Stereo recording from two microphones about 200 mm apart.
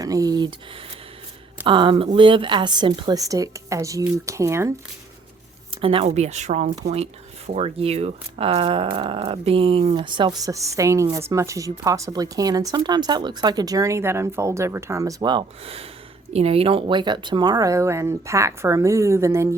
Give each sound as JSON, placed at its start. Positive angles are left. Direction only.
{"t": 0.0, "sound": "speech", "side_deg": -15}
{"t": 1.6, "sound": "speech", "side_deg": -25}
{"t": 5.8, "sound": "speech", "side_deg": -25}